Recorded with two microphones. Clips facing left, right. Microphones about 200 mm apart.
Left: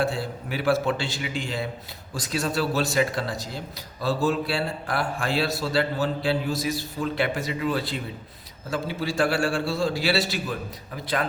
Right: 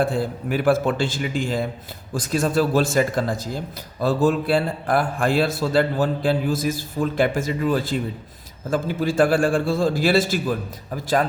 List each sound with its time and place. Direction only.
0.0 s a man's voice: 50° right (ahead or behind)